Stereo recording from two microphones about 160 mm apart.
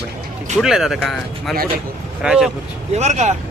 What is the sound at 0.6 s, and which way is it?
Speech, centre (ahead or behind).